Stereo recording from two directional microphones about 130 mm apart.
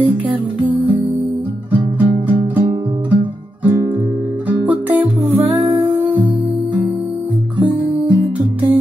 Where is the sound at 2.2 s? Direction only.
15° right (ahead or behind).